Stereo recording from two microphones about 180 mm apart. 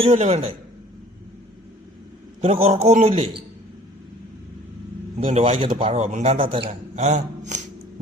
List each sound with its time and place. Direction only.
0.0 s a man's voice: 35° right (ahead or behind)
2.4 s a man's voice: 35° right (ahead or behind)
5.1 s a man's voice: 35° right (ahead or behind)